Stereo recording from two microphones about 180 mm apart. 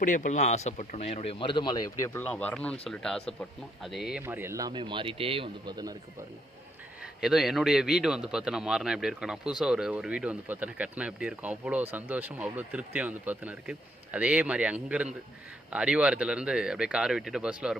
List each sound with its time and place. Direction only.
0.0 s speech: 45° left (ahead or behind); by 2.0 s 20° left (ahead or behind)
2.1 s a man's voice: 10° left (ahead or behind)
4.2 s speech: 10° right (ahead or behind)
7.0 s a man's voice: 5° right (ahead or behind)